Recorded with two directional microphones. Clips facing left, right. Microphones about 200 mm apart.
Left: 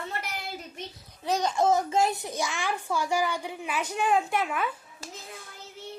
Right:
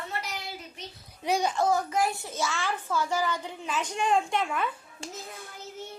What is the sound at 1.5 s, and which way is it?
A child's voice, 20° left (ahead or behind).